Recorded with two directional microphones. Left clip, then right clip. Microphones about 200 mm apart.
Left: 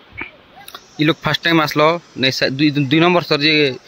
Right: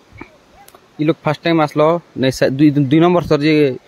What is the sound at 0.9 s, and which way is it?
Speech, 5° right (ahead or behind).